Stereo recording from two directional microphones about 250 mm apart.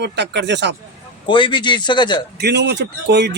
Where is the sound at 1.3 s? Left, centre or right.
Centre.